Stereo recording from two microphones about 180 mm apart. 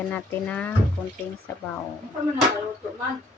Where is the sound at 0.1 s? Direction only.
10° left (ahead or behind).